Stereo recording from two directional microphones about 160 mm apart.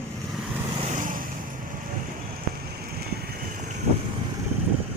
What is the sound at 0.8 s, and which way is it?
Vehicle, 50° right (ahead or behind).